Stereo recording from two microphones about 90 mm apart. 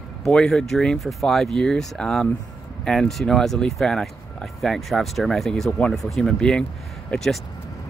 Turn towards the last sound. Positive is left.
turn(degrees=5)  # may be behind; listen again after turning